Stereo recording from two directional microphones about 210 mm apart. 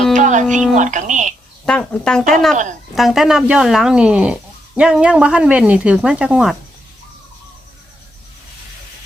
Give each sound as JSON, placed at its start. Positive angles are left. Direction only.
{"t": 0.2, "sound": "music", "side_deg": -35}
{"t": 0.8, "sound": "speech", "side_deg": -35}
{"t": 1.6, "sound": "speech", "side_deg": 5}